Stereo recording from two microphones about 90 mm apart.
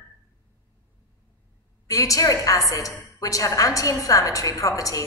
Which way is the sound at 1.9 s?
40° left (ahead or behind).